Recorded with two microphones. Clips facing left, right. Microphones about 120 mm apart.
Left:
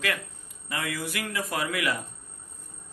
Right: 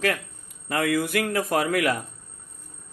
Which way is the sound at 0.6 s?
55° right (ahead or behind).